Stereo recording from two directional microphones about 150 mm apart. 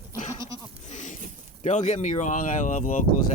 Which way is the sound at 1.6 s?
55° left (ahead or behind).